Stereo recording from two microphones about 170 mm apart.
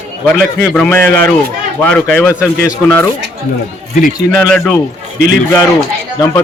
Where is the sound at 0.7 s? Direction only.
10° left (ahead or behind).